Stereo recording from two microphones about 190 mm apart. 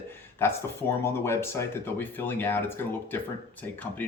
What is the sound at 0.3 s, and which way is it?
Speech, 15° left (ahead or behind).